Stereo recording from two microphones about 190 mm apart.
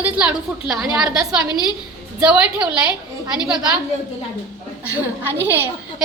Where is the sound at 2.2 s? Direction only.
5° right (ahead or behind).